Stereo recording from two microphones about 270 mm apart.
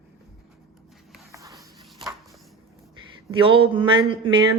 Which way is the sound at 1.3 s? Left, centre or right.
Centre.